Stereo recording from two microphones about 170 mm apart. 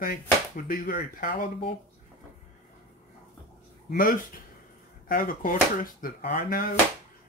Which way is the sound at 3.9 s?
55° left (ahead or behind).